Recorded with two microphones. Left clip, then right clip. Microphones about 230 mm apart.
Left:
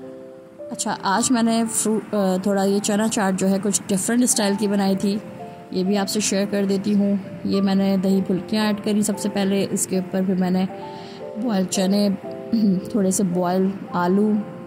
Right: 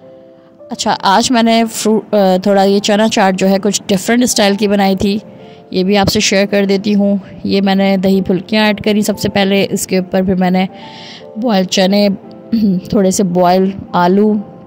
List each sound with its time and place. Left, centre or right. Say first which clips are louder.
0.7 s a woman's voice: right 11 dB; right